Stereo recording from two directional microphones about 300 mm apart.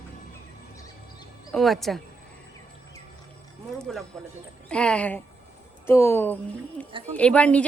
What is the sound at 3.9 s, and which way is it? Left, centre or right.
A woman's voice, centre.